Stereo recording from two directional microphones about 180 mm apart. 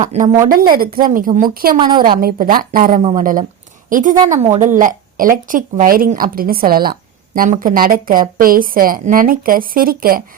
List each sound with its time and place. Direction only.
0.0 s a woman's voice: 40° right (ahead or behind)
1.8 s a woman's voice: 25° right (ahead or behind)
2.2 s a woman's voice: 50° right (ahead or behind)
3.0 s speech: 35° right (ahead or behind)
3.8 s a woman's voice: 45° right (ahead or behind)